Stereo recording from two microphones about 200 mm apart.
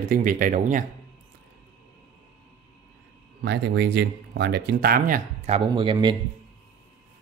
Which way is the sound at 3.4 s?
55° right (ahead or behind).